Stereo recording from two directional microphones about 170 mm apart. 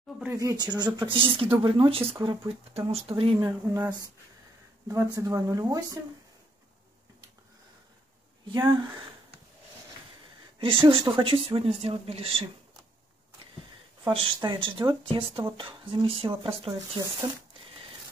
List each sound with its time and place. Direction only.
0.2 s speech: 15° right (ahead or behind); by 3.3 s 35° right (ahead or behind)
3.3 s speech: 20° right (ahead or behind)
4.8 s speech: 20° right (ahead or behind)
10.6 s speech: 30° right (ahead or behind)
14.0 s speech: 30° right (ahead or behind)